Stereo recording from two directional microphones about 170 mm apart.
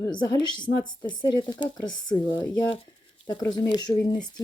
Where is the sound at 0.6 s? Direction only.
25° left (ahead or behind).